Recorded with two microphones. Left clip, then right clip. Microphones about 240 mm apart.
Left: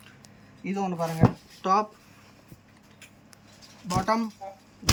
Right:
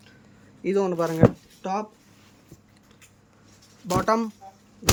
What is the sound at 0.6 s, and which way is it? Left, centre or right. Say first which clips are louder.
Speech: right 7 dB; centre.